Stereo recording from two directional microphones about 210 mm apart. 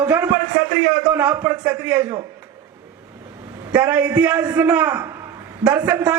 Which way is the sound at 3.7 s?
10° right (ahead or behind).